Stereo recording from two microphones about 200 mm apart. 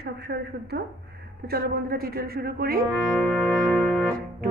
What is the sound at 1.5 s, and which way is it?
Music, 50° right (ahead or behind).